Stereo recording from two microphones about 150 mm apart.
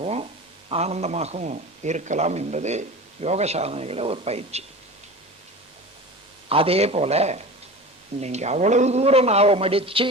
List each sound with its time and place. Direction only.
0.0 s a man's voice: 45° right (ahead or behind)
6.5 s a man's voice: 40° right (ahead or behind)